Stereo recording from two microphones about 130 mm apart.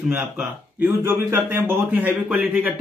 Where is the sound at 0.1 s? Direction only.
15° right (ahead or behind).